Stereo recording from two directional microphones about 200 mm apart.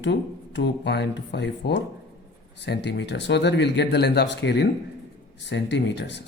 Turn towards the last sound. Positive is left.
turn(degrees=60)  # may be behind; listen again after turning